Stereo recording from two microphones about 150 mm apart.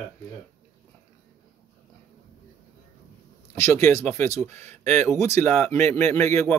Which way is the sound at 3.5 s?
20° left (ahead or behind).